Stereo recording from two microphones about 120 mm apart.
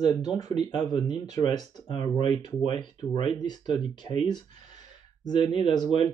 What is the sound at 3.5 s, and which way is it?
Speech, 35° left (ahead or behind).